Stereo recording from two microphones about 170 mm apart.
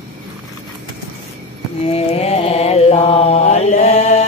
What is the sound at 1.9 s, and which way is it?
Mantra, 35° left (ahead or behind).